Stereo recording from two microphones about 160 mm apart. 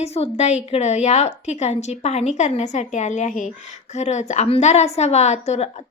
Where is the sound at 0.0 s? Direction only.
40° left (ahead or behind).